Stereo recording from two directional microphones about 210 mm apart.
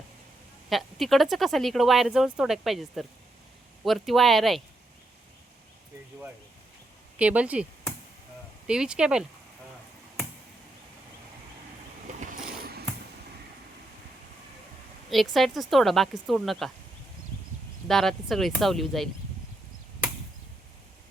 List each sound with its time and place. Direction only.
0.7 s speech: centre (ahead or behind)
7.2 s speech: 5° right (ahead or behind)
12.2 s a sound: 45° right (ahead or behind)
15.1 s speech: centre (ahead or behind)
17.8 s speech: centre (ahead or behind)